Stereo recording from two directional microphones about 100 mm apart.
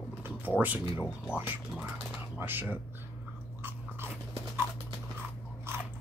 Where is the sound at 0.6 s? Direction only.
15° right (ahead or behind).